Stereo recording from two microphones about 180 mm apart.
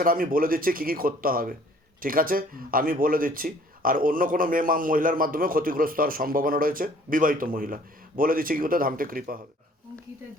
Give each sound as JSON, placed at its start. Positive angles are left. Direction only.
{"t": 0.0, "sound": "speech", "side_deg": -50}